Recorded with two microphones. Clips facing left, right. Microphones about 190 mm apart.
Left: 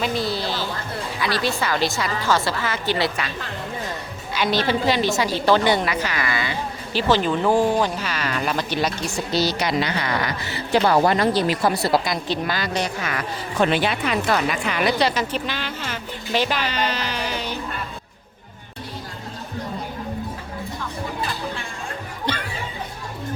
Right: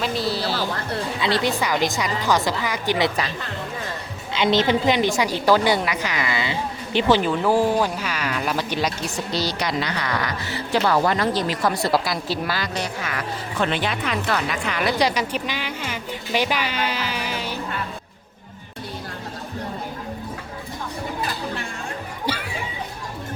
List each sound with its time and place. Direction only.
0.0 s a sound: centre (ahead or behind)
1.2 s a woman's voice: 20° right (ahead or behind)
4.4 s a woman's voice: 20° right (ahead or behind)
7.2 s a woman's voice: 5° right (ahead or behind)
9.3 s a woman's voice: 5° left (ahead or behind)
9.8 s a woman's voice: 25° left (ahead or behind)
12.0 s a woman's voice: 5° right (ahead or behind)
13.6 s speech: 10° left (ahead or behind)
14.9 s a woman's voice: 15° right (ahead or behind)
22.3 s chatter: 5° right (ahead or behind)